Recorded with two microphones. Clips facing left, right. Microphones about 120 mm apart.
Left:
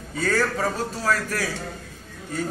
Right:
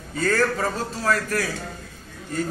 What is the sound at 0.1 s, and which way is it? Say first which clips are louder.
A man's voice: right 2 dB; 10° left (ahead or behind).